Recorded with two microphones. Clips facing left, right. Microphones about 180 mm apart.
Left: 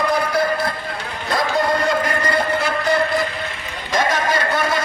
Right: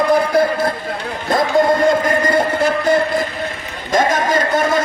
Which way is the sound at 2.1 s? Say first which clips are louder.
Right 4 dB; 45° right (ahead or behind).